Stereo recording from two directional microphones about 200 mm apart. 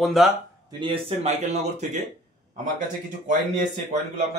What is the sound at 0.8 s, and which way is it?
A man's voice, 30° right (ahead or behind).